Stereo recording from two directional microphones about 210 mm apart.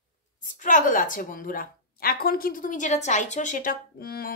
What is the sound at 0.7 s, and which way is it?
A woman's voice, 40° left (ahead or behind).